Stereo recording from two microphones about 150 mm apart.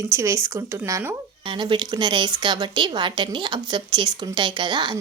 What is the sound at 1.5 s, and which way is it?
A woman's voice, 30° right (ahead or behind).